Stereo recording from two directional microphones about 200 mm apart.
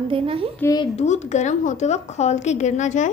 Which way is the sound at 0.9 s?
35° left (ahead or behind).